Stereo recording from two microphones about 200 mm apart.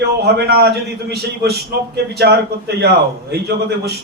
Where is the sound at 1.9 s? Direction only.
55° right (ahead or behind).